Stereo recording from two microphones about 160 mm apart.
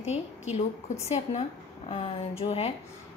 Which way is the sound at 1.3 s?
35° left (ahead or behind).